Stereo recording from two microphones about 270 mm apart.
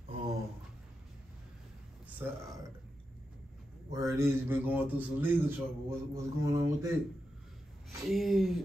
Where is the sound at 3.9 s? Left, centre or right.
Centre.